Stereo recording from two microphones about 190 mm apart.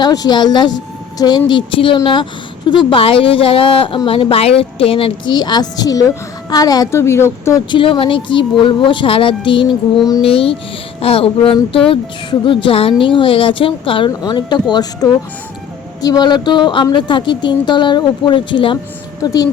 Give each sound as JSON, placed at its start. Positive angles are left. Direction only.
{"t": 0.0, "sound": "speech", "side_deg": 20}
{"t": 7.8, "sound": "a child's voice", "side_deg": 25}